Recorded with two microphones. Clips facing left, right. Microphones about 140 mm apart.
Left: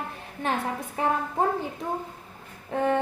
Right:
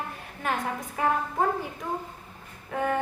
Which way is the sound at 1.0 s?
30° left (ahead or behind).